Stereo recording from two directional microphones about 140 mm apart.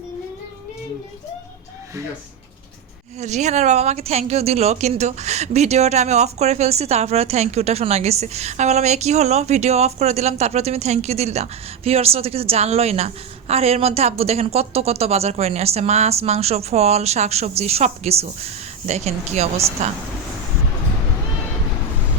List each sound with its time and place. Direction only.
3.2 s speech: 55° right (ahead or behind)